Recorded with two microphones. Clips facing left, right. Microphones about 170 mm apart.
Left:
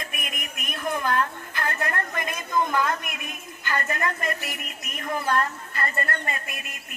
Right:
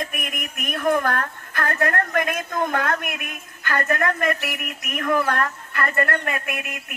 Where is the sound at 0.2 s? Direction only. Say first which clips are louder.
Right 5 dB; 55° right (ahead or behind).